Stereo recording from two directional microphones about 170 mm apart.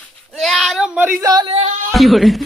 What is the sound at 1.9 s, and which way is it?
Speech, centre (ahead or behind).